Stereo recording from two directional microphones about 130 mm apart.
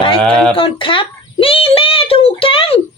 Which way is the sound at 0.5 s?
40° left (ahead or behind).